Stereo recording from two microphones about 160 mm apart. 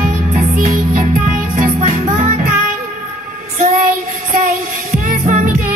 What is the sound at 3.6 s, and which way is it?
Child singing, 50° right (ahead or behind).